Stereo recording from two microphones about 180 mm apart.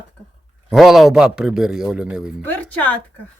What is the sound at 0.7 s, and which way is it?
Speech, centre (ahead or behind).